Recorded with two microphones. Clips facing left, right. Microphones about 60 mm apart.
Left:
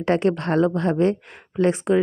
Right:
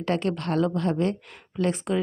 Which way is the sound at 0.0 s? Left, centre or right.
Left.